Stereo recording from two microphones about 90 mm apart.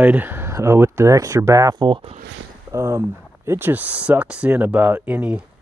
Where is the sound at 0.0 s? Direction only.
20° right (ahead or behind); by 1.8 s 40° right (ahead or behind).